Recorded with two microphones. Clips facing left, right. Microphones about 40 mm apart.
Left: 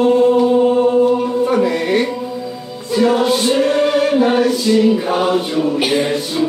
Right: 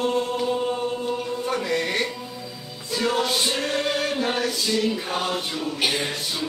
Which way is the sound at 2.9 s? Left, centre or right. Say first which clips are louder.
Left 10 dB; centre.